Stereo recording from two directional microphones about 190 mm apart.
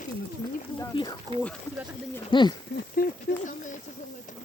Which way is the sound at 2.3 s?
25° left (ahead or behind).